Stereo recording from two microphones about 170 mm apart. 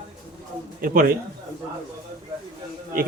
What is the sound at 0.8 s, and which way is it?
Speech, 55° right (ahead or behind).